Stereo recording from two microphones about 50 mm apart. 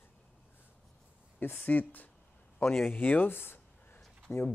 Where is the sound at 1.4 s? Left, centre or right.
Left.